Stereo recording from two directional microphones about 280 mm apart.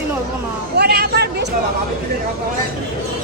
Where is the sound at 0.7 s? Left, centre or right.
Right.